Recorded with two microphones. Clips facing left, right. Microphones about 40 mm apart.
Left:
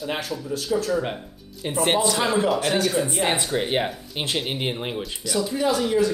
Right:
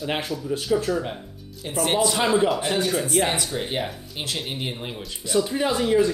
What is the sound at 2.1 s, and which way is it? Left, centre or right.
Speech, centre.